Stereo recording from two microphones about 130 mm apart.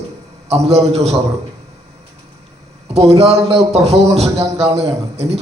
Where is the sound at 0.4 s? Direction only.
55° right (ahead or behind).